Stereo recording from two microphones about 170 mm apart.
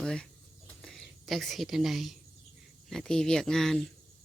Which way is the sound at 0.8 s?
5° left (ahead or behind).